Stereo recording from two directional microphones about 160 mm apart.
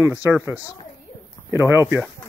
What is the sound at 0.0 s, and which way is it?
Speech, 15° right (ahead or behind).